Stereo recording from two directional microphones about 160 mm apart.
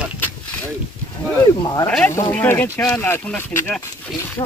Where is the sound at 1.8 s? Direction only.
10° left (ahead or behind).